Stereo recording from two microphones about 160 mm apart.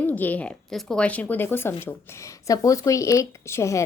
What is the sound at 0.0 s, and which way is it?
Speech, 10° left (ahead or behind).